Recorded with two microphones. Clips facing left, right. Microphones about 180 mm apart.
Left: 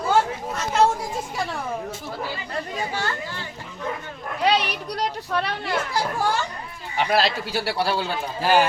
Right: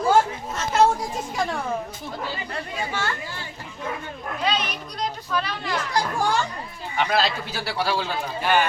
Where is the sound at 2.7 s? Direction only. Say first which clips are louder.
Even; 40° left (ahead or behind).